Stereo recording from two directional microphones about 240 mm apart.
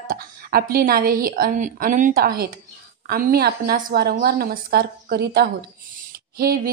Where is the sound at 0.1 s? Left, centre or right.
Right.